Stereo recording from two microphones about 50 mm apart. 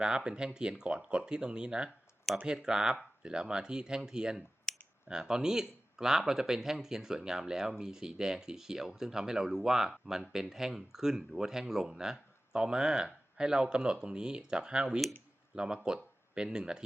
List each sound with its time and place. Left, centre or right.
0.3 s speech: centre
4.7 s computer keyboard: centre
5.0 s speech: centre